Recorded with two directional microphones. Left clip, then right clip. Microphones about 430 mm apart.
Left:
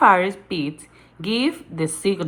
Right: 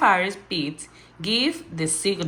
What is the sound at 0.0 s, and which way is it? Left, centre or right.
A woman's voice, centre.